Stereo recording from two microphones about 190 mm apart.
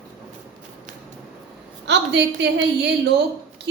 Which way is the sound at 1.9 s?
65° right (ahead or behind).